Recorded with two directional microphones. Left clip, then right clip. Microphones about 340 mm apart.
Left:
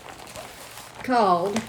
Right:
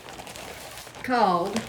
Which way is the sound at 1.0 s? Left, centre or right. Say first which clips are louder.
Left 2 dB; centre.